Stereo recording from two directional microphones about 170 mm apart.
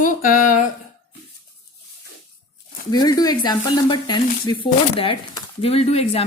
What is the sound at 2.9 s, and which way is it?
A woman's voice, 25° left (ahead or behind).